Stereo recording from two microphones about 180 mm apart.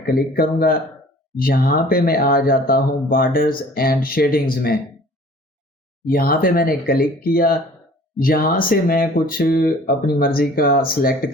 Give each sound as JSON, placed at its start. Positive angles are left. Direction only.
{"t": 0.0, "sound": "speech", "side_deg": 55}
{"t": 6.1, "sound": "speech", "side_deg": 55}